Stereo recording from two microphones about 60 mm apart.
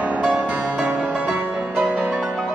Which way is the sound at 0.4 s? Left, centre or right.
Right.